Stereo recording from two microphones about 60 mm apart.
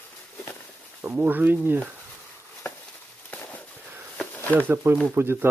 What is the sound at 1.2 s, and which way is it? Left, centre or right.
Speech, right.